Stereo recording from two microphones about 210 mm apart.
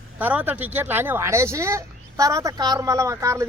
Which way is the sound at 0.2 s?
10° right (ahead or behind).